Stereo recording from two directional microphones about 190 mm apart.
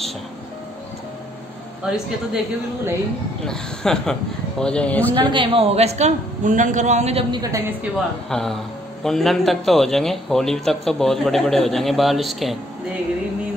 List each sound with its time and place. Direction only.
1.9 s a man's voice: 5° right (ahead or behind)
5.1 s a man's voice: 25° right (ahead or behind)
8.3 s a man's voice: 5° left (ahead or behind)